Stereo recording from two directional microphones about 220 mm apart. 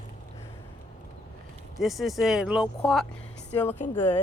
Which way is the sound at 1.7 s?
Centre (ahead or behind).